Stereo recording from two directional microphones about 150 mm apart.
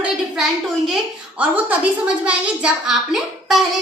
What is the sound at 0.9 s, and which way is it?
A child's voice, 5° right (ahead or behind).